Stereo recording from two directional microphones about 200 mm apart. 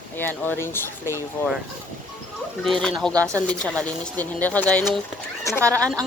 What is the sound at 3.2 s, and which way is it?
Speech, 15° right (ahead or behind).